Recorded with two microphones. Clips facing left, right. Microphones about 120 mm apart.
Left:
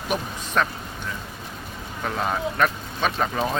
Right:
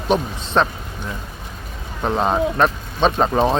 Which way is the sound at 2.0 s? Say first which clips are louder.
Right 7 dB; 30° right (ahead or behind).